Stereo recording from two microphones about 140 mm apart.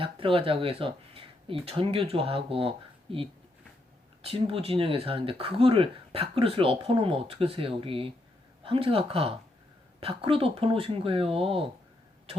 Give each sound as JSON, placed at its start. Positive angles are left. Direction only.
{"t": 0.0, "sound": "speech", "side_deg": -40}